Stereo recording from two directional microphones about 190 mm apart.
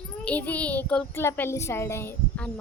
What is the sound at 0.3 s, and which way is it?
A child's voice, 10° left (ahead or behind).